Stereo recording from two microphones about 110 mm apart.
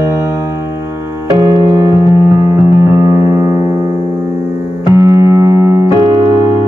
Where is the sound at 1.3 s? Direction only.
40° right (ahead or behind).